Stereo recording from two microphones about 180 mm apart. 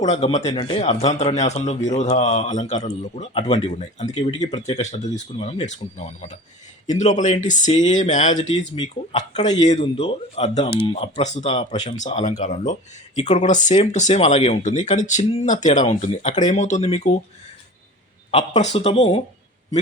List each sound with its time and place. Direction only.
0.0 s speech: 40° left (ahead or behind)
8.8 s speech: 30° left (ahead or behind)
11.8 s speech: 40° left (ahead or behind)
18.3 s speech: 25° left (ahead or behind)
18.6 s speech: 35° left (ahead or behind)